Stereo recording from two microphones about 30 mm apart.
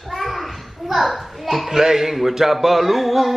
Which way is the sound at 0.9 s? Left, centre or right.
Centre.